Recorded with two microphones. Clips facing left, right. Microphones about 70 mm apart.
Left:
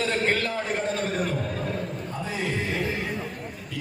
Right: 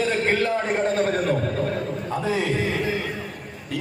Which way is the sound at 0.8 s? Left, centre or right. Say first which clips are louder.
Right 6 dB; right.